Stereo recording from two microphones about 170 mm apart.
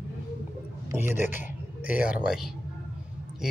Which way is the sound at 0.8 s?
15° right (ahead or behind).